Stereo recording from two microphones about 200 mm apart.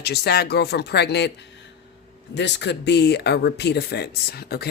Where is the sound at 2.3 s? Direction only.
60° left (ahead or behind).